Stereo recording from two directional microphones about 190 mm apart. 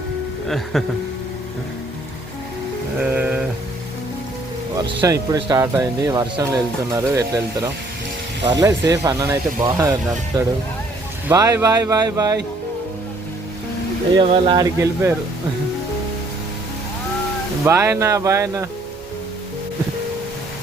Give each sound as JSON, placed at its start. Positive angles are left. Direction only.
{"t": 0.4, "sound": "speech", "side_deg": 0}
{"t": 3.0, "sound": "a sound", "side_deg": -10}
{"t": 4.8, "sound": "speech", "side_deg": -15}
{"t": 14.2, "sound": "speech", "side_deg": -25}
{"t": 17.6, "sound": "speech", "side_deg": -15}